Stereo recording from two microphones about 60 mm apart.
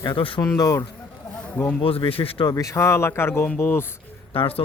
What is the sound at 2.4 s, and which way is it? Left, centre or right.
Speech, left.